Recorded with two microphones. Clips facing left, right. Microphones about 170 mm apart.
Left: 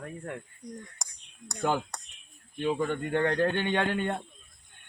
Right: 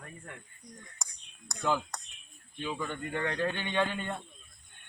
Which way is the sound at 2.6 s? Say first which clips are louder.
Left 7 dB; 55° left (ahead or behind).